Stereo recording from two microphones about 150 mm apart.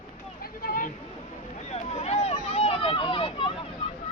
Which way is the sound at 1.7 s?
45° left (ahead or behind).